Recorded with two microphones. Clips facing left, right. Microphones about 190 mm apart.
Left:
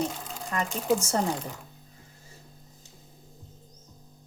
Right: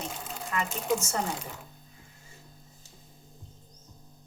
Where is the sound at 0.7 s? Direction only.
Centre (ahead or behind).